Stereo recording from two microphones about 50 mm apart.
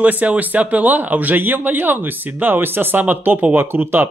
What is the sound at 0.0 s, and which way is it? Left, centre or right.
A man's voice, right.